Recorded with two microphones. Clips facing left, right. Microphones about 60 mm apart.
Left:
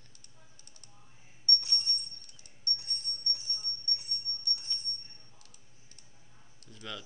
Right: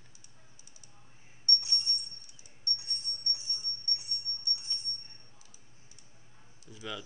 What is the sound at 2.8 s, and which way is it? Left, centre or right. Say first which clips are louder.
Dog: even; left.